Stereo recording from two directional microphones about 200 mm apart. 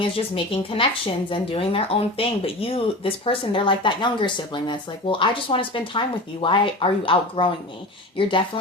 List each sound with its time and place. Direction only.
0.0 s speech: 25° left (ahead or behind)